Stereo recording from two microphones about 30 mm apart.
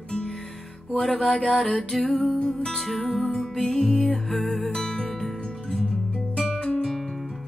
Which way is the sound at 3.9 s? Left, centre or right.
Left.